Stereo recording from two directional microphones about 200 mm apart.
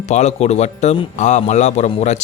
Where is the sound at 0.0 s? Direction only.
35° left (ahead or behind).